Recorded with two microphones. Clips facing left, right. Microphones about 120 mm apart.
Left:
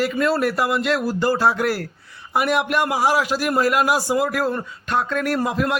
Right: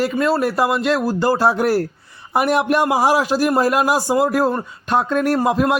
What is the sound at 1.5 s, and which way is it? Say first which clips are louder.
Speech: right 5 dB; 35° right (ahead or behind).